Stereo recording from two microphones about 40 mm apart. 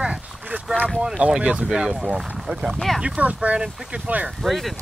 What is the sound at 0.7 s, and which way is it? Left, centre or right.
Speech, left.